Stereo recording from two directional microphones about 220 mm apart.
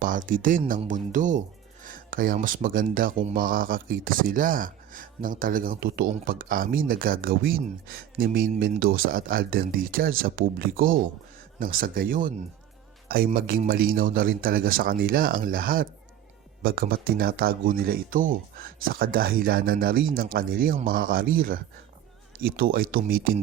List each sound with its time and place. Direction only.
0.0 s speech: 40° right (ahead or behind)